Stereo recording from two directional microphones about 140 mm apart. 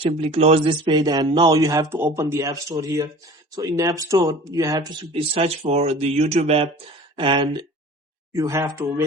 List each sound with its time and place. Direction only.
0.0 s speech: 45° right (ahead or behind)
7.2 s speech: 35° right (ahead or behind)
8.3 s speech: 20° right (ahead or behind)